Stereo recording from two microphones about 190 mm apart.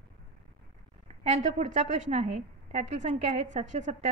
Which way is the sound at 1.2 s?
35° right (ahead or behind).